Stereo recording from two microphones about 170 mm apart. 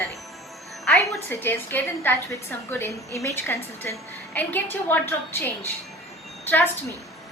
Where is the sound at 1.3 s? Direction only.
10° left (ahead or behind).